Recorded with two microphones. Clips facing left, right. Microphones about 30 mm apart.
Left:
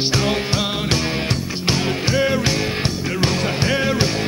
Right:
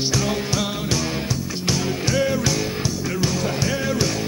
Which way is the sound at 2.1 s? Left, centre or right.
Left.